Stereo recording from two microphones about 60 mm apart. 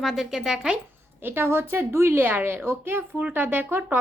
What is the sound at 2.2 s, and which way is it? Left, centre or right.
Speech, right.